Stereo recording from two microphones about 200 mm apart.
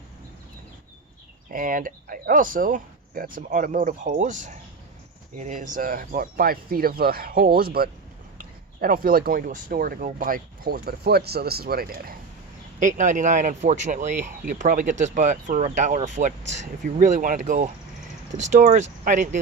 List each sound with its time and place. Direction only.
1.5 s speech: 45° right (ahead or behind)